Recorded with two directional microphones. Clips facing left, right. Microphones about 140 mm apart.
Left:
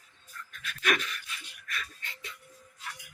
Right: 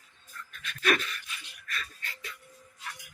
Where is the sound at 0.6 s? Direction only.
10° left (ahead or behind).